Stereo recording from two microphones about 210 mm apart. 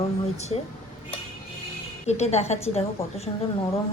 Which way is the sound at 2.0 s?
30° left (ahead or behind).